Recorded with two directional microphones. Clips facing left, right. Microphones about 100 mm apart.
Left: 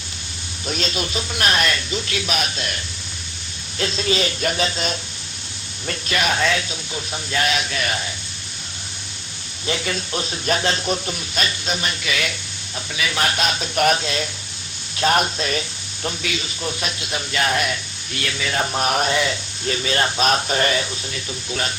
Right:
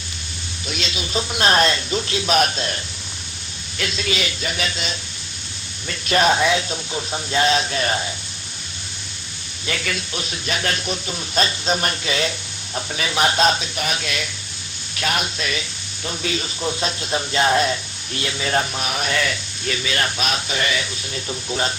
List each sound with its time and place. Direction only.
0.7 s speech: 40° left (ahead or behind)
1.3 s speech: 30° right (ahead or behind)
3.8 s speech: 35° left (ahead or behind)
6.1 s speech: 35° right (ahead or behind)
6.3 s speech: 20° right (ahead or behind)
9.6 s speech: 25° left (ahead or behind)
10.1 s speech: 35° left (ahead or behind)
11.3 s speech: 30° right (ahead or behind)
13.6 s speech: 50° left (ahead or behind)
14.0 s speech: 30° left (ahead or behind)
16.2 s speech: 35° right (ahead or behind)
18.6 s speech: 40° left (ahead or behind)
19.1 s speech: 25° left (ahead or behind); by 20.8 s 40° left (ahead or behind)